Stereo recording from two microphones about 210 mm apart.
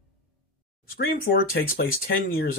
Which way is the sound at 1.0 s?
45° left (ahead or behind).